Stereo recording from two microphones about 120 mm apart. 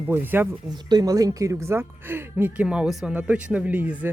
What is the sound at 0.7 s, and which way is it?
Speech, 35° right (ahead or behind).